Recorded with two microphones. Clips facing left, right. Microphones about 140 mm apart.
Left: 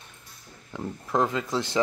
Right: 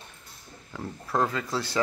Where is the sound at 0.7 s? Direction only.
15° left (ahead or behind).